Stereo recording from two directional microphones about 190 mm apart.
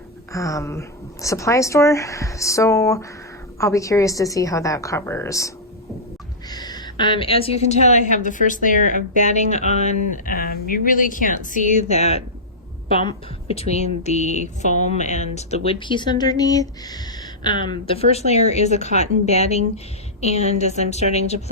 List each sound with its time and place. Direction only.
0.3 s speech: 15° left (ahead or behind)
6.5 s a woman's voice: 20° left (ahead or behind); by 9.9 s 35° left (ahead or behind)
10.2 s a woman's voice: 50° left (ahead or behind); by 21.5 s 35° left (ahead or behind)